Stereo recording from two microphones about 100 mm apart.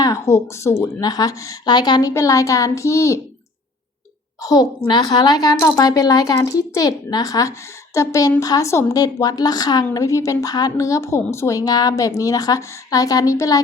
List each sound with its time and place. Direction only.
0.0 s a woman's voice: 35° left (ahead or behind)
1.7 s a woman's voice: 45° left (ahead or behind); by 3.2 s 30° left (ahead or behind)
4.4 s a woman's voice: 45° left (ahead or behind)